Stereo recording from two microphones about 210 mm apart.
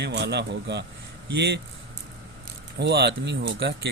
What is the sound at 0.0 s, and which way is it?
Speech, 55° right (ahead or behind).